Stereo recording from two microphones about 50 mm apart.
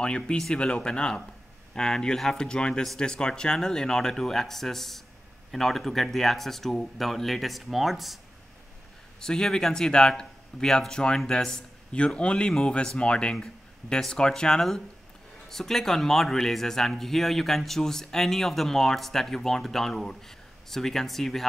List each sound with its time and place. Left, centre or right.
0.0 s a man's voice: centre
9.2 s a man's voice: centre